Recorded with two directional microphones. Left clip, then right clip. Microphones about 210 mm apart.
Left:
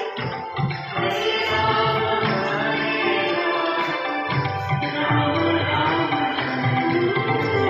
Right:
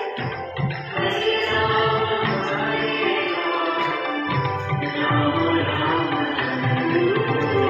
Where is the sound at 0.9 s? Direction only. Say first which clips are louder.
Right 1 dB; 35° left (ahead or behind).